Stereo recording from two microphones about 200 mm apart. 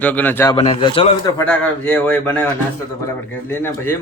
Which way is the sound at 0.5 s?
25° left (ahead or behind).